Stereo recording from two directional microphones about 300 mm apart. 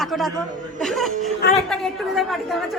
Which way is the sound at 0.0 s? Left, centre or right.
Centre.